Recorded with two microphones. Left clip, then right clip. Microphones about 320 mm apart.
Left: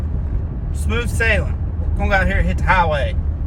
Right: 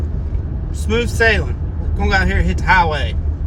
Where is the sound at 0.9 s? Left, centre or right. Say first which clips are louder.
Right 4 dB; centre.